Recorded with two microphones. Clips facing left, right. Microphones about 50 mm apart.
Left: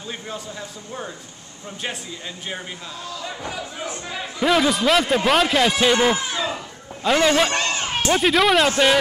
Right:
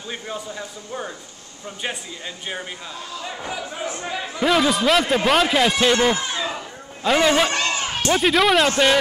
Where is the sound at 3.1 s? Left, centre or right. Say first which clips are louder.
Right 1 dB; centre.